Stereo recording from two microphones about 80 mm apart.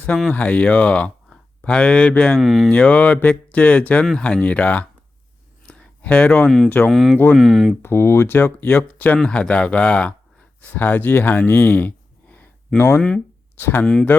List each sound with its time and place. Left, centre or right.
0.3 s speech: centre
2.4 s speech: centre
2.6 s speech: centre
5.6 s a sound: centre
6.7 s speech: left
6.9 s speech: centre
7.8 s speech: left
9.1 s speech: centre
11.4 s a sound: left
13.0 s speech: centre
13.6 s speech: left